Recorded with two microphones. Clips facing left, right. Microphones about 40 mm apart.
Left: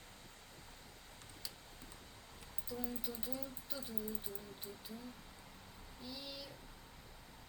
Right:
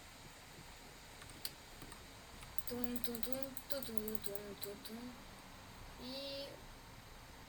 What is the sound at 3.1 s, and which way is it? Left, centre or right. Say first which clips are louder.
Speech: right 1 dB; right.